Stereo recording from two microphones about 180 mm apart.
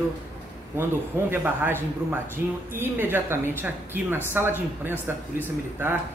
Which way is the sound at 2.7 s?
10° right (ahead or behind).